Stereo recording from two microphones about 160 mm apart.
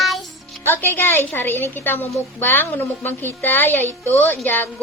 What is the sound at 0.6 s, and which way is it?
A woman's voice, 15° left (ahead or behind).